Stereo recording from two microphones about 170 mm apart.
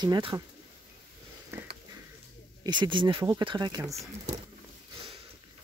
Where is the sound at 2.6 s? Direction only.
25° right (ahead or behind).